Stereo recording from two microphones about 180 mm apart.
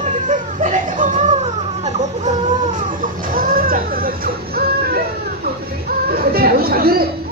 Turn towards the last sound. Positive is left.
turn(degrees=-55)  # may be behind; listen again after turning